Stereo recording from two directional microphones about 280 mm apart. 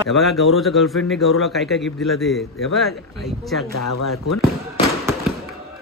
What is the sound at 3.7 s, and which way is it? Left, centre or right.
Speech, left.